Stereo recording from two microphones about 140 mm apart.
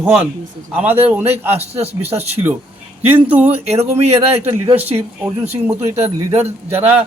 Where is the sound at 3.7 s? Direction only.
45° right (ahead or behind).